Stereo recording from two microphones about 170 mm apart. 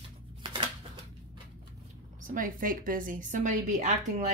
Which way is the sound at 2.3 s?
55° right (ahead or behind).